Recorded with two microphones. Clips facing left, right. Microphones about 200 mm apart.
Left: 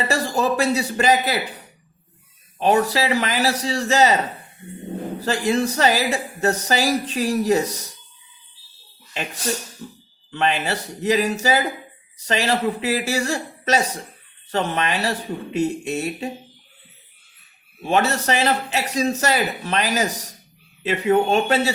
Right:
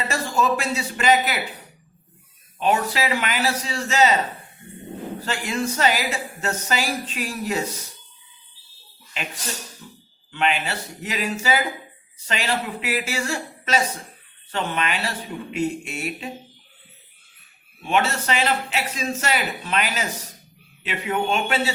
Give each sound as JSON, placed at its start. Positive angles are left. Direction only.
{"t": 0.1, "sound": "speech", "side_deg": 35}
{"t": 2.6, "sound": "speech", "side_deg": 35}
{"t": 5.3, "sound": "speech", "side_deg": 35}
{"t": 10.3, "sound": "speech", "side_deg": 40}
{"t": 17.8, "sound": "speech", "side_deg": 40}